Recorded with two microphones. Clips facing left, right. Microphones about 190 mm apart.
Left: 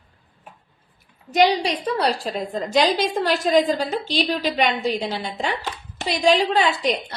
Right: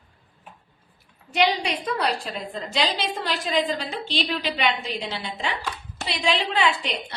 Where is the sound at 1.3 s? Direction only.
40° left (ahead or behind).